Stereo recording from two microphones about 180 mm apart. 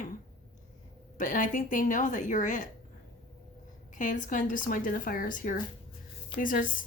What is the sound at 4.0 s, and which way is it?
Speech, 45° left (ahead or behind).